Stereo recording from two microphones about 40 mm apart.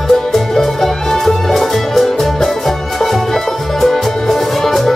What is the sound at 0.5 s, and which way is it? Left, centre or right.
Music, centre.